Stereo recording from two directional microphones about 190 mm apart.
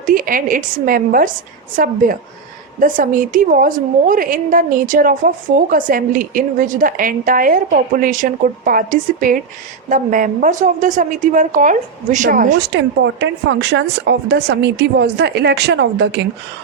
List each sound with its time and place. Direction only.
0.0 s a woman's voice: 45° right (ahead or behind)
12.5 s speech: 65° right (ahead or behind)